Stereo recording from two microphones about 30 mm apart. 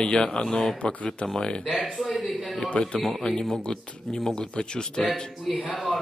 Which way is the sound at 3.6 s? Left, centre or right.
Left.